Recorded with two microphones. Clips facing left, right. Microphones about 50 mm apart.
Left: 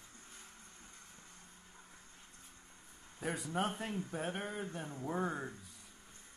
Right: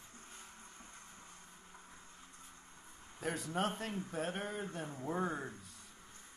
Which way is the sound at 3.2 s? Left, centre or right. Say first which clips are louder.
Even; centre.